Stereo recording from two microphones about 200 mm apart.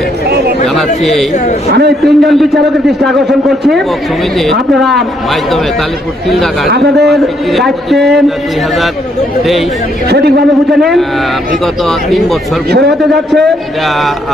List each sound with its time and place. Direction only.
0.7 s speech: centre (ahead or behind)
1.7 s a man's voice: 55° right (ahead or behind)
2.0 s speech: centre (ahead or behind)
6.7 s a man's voice: 55° right (ahead or behind)
7.1 s speech: centre (ahead or behind)
10.0 s a man's voice: 55° right (ahead or behind)
10.8 s speech: centre (ahead or behind)